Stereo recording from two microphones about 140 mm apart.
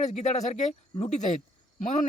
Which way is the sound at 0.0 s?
55° left (ahead or behind).